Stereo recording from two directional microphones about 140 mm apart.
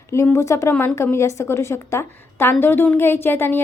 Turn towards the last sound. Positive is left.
turn(degrees=15)  # may be behind; listen again after turning